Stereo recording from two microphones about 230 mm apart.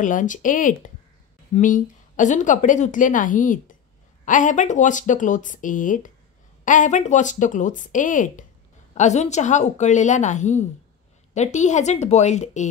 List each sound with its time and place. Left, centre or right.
0.0 s a woman's voice: left